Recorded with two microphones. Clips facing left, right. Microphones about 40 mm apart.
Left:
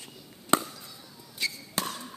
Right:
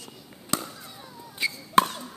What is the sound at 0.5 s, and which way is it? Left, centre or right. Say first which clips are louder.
Chop: left 5 dB; left.